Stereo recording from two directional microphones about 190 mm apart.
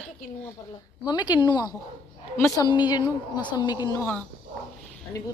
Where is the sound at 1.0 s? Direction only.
25° left (ahead or behind).